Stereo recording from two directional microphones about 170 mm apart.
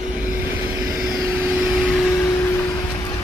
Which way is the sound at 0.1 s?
10° right (ahead or behind).